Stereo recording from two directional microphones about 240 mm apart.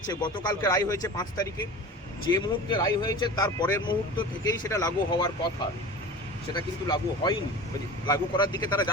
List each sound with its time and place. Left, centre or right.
0.1 s speech: centre
6.5 s speech: centre